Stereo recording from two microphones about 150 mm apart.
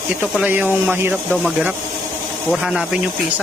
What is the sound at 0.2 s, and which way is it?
Speech, 10° right (ahead or behind).